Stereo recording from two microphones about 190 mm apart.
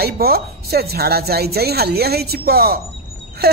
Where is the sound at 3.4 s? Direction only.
55° right (ahead or behind).